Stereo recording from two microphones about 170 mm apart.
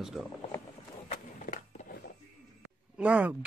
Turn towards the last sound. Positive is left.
turn(degrees=-10)  # may be behind; listen again after turning